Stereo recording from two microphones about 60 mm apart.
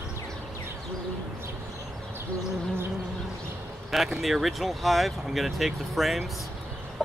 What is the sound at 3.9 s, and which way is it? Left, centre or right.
Speech, centre.